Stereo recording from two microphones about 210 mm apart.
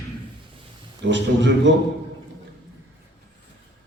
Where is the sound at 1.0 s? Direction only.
60° right (ahead or behind).